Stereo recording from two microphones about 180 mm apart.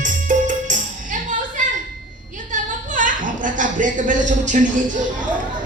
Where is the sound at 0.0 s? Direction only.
45° right (ahead or behind).